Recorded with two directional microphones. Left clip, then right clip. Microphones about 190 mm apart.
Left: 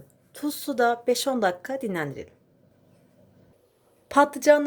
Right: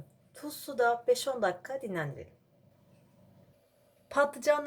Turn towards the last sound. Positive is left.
turn(degrees=45)  # may be behind; listen again after turning